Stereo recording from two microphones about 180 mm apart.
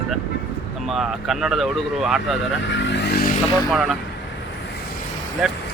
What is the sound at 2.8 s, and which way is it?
Vehicle, 70° left (ahead or behind).